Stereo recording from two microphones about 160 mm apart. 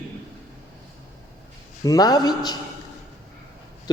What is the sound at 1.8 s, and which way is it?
Speech, 20° left (ahead or behind).